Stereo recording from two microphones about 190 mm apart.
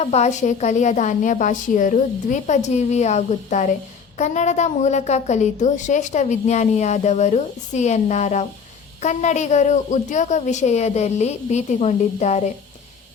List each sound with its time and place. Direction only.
0.0 s a woman's voice: 35° left (ahead or behind)